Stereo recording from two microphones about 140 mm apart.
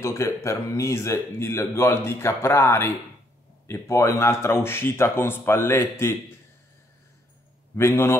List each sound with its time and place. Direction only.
0.0 s speech: 20° left (ahead or behind)
7.7 s speech: 20° left (ahead or behind)